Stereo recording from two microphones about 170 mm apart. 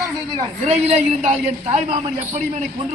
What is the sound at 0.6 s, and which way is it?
A man's voice, 40° right (ahead or behind).